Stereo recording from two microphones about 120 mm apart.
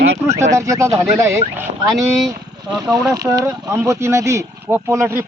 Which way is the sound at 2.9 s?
30° right (ahead or behind).